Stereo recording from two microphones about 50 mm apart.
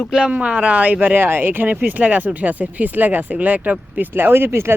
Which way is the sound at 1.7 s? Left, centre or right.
Right.